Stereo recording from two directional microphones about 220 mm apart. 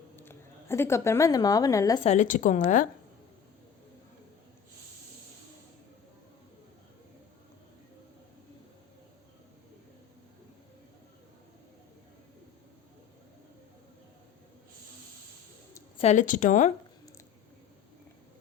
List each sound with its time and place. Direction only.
0.2 s speech: 10° left (ahead or behind)
2.0 s a woman's voice: 35° left (ahead or behind)
16.0 s a woman's voice: 30° left (ahead or behind)